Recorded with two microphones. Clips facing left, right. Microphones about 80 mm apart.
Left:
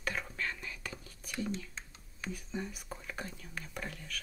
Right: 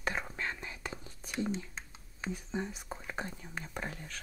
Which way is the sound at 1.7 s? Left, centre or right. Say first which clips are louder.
Right 2 dB; right.